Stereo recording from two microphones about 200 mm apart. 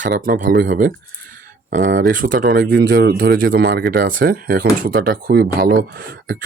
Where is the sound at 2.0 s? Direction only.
45° right (ahead or behind).